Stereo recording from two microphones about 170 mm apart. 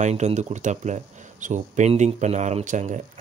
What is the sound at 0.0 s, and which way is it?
Speech, 40° right (ahead or behind).